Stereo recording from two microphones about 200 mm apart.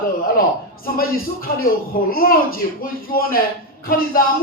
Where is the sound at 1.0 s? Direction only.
45° left (ahead or behind).